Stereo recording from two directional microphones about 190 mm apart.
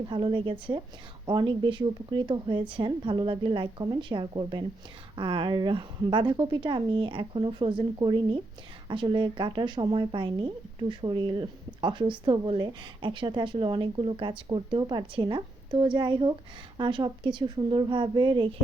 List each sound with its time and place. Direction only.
0.1 s a woman's voice: 25° right (ahead or behind)